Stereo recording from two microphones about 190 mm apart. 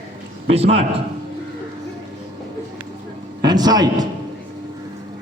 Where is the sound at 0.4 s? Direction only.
35° right (ahead or behind).